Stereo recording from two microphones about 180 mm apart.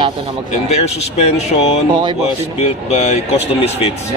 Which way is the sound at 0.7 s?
35° left (ahead or behind).